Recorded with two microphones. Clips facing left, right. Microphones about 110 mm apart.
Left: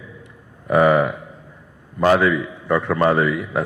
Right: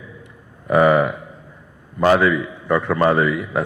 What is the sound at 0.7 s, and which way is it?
A man's voice, 25° right (ahead or behind).